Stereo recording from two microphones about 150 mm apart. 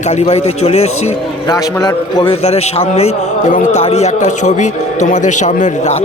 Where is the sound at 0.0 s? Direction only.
45° left (ahead or behind).